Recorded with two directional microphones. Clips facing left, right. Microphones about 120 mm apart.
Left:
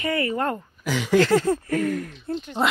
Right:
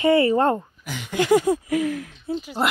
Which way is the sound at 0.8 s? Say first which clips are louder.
Left 8 dB; 90° left.